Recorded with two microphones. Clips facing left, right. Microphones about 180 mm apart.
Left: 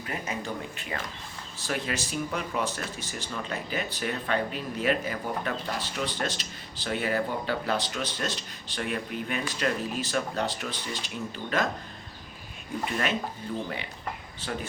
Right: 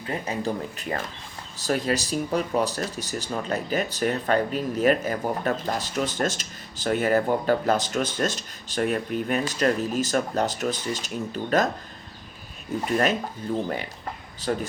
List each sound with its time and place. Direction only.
0.0 s speech: 30° right (ahead or behind)
13.5 s speech: 45° right (ahead or behind)